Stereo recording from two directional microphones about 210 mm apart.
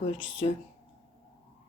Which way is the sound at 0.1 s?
25° left (ahead or behind).